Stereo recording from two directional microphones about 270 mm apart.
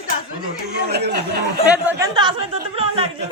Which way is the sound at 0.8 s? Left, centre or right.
Right.